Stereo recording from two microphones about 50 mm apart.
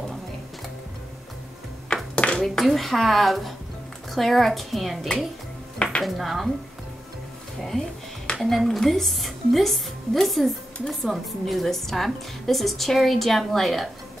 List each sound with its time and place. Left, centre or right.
2.1 s a sound: left
2.4 s speech: centre
8.4 s speech: centre